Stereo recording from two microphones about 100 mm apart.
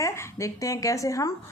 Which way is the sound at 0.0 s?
30° left (ahead or behind).